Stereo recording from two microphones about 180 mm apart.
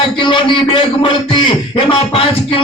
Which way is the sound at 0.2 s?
25° left (ahead or behind).